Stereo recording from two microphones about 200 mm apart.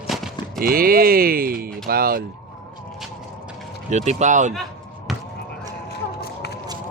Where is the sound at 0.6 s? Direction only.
45° right (ahead or behind).